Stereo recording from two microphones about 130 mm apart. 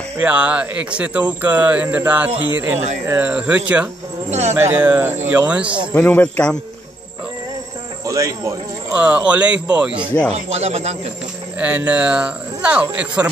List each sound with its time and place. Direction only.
0.2 s speech: 10° right (ahead or behind)
4.3 s speech: 60° right (ahead or behind)
4.6 s speech: 15° right (ahead or behind)
5.9 s speech: 15° left (ahead or behind)
8.1 s speech: 25° right (ahead or behind)
8.9 s speech: 10° right (ahead or behind)
10.3 s speech: 55° right (ahead or behind)
11.6 s speech: 10° right (ahead or behind)